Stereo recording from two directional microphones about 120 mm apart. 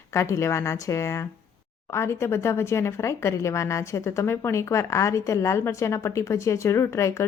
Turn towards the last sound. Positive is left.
turn(degrees=25)  # may be behind; listen again after turning